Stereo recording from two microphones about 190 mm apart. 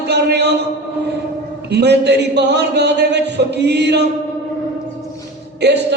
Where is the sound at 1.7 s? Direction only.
60° right (ahead or behind).